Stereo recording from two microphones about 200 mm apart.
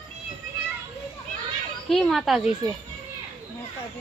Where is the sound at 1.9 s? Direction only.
Centre (ahead or behind).